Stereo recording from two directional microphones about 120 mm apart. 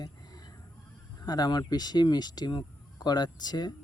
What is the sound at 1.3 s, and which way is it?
Speech, 35° left (ahead or behind).